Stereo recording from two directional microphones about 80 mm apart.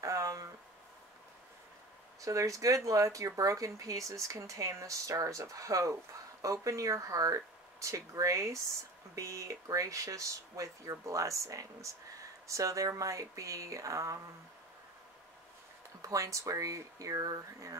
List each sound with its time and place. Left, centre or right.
0.0 s a sound: right
2.2 s speech: right
16.0 s speech: right